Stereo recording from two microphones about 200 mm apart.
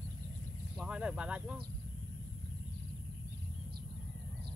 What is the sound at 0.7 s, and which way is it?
Speech, 5° right (ahead or behind).